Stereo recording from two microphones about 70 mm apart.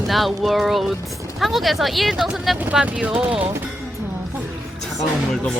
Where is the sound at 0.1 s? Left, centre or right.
Centre.